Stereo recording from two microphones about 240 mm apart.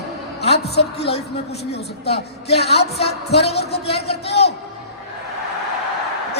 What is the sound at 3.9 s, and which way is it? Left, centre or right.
Speech, left.